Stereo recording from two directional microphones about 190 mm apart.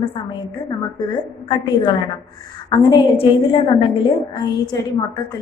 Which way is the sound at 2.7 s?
25° left (ahead or behind).